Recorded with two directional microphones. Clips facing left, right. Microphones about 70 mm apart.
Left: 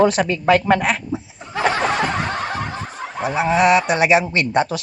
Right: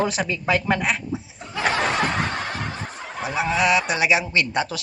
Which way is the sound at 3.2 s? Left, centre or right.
Left.